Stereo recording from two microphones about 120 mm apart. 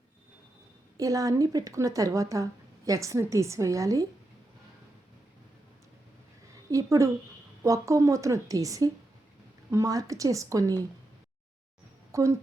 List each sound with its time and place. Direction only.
0.9 s speech: 30° right (ahead or behind)
6.5 s a sound: 25° right (ahead or behind)
7.6 s speech: 25° right (ahead or behind)
12.1 s speech: 25° right (ahead or behind)